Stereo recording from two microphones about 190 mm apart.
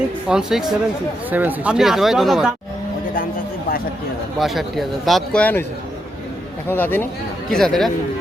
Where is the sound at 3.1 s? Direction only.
50° left (ahead or behind).